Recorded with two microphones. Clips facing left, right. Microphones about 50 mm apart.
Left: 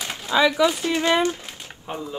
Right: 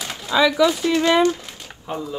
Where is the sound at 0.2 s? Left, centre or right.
Centre.